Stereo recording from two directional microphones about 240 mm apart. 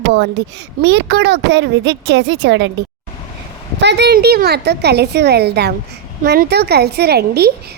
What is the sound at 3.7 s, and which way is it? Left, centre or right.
A woman's voice, right.